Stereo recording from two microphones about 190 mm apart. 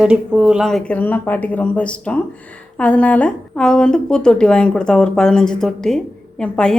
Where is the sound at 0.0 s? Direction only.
5° right (ahead or behind).